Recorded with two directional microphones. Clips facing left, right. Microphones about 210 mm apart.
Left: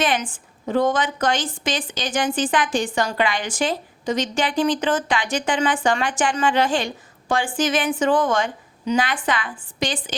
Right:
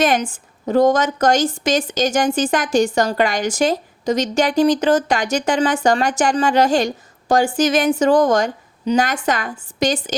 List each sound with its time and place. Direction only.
0.0 s a woman's voice: 40° right (ahead or behind)